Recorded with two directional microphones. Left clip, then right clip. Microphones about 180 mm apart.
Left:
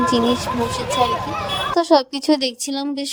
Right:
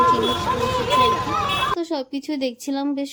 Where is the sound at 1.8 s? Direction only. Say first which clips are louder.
Left 11 dB; 45° left (ahead or behind).